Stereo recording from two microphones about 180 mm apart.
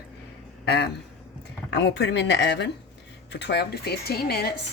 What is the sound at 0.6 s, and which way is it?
Speech, 65° left (ahead or behind).